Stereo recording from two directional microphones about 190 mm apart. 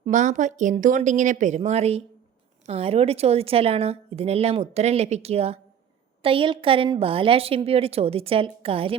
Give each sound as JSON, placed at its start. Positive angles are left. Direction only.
{"t": 0.0, "sound": "a woman's voice", "side_deg": -40}